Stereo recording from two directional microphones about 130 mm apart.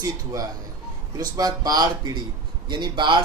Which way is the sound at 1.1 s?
30° right (ahead or behind).